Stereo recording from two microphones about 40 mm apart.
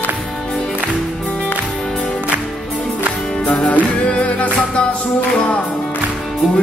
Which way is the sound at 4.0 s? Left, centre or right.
Left.